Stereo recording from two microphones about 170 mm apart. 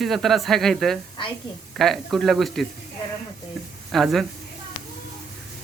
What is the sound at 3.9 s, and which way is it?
Speech, centre (ahead or behind).